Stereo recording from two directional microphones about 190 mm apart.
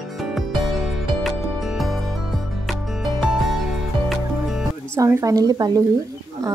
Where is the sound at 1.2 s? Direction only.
Centre (ahead or behind).